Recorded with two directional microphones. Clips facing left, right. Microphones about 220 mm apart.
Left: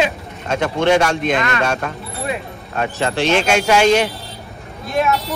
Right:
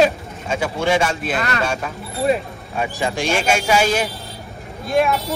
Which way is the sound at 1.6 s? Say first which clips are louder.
Left 3 dB; 5° right (ahead or behind).